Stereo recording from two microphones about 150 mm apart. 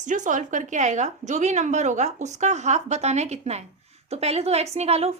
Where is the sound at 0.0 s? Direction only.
55° right (ahead or behind).